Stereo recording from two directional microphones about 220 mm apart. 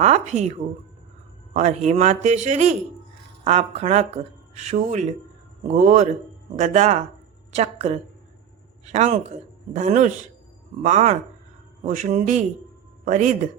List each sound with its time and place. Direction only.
0.0 s a man's voice: 30° right (ahead or behind)
1.5 s a man's voice: 30° right (ahead or behind)